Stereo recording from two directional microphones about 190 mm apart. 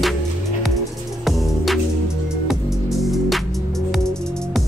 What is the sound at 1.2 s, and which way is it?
Music, centre (ahead or behind).